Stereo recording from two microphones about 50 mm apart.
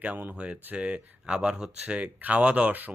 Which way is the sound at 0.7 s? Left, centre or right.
Right.